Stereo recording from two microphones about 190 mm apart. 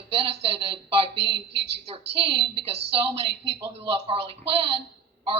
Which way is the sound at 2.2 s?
25° right (ahead or behind).